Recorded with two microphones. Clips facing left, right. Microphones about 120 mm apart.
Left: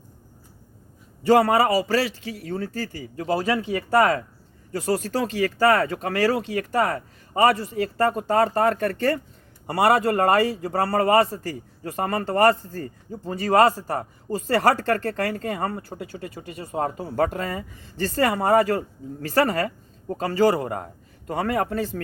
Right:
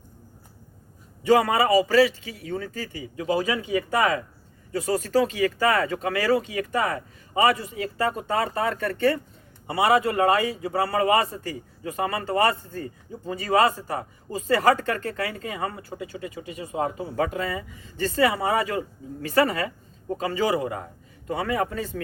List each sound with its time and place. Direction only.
1.3 s a man's voice: 40° left (ahead or behind)